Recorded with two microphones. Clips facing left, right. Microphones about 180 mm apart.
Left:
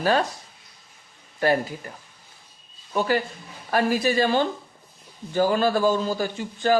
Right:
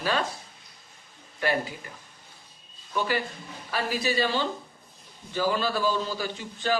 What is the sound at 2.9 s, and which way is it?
Speech, 45° left (ahead or behind).